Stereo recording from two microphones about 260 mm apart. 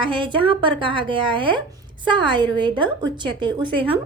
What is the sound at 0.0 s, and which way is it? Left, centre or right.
A woman's voice, centre.